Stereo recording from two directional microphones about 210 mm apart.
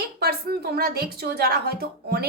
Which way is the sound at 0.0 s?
50° right (ahead or behind).